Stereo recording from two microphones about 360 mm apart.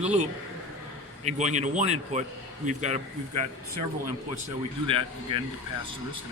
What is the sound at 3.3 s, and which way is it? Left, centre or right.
Speech, right.